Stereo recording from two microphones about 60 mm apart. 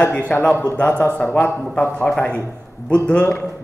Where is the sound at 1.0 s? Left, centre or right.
Left.